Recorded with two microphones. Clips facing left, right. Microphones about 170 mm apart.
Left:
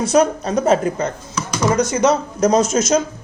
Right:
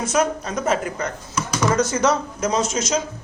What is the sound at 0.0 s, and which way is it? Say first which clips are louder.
Speech: left 6 dB; 35° left (ahead or behind).